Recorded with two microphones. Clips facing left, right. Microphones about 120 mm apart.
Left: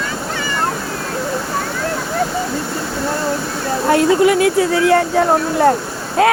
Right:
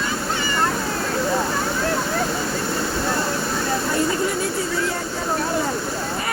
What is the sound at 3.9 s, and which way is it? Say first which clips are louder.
Speech: left 13 dB; 90° left.